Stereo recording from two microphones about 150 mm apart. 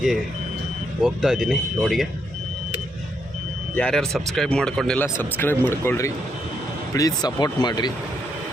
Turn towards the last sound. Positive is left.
turn(degrees=30)  # may be behind; listen again after turning